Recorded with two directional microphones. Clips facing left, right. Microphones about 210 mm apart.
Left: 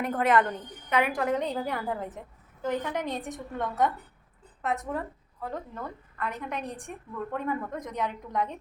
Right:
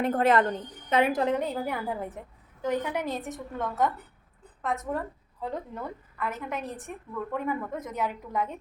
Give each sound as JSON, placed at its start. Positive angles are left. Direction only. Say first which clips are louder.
{"t": 0.0, "sound": "a woman's voice", "louder": "right 2 dB", "side_deg": -30}
{"t": 1.4, "sound": "a woman's voice", "louder": "even", "side_deg": -5}
{"t": 5.4, "sound": "a woman's voice", "louder": "right 2 dB", "side_deg": -15}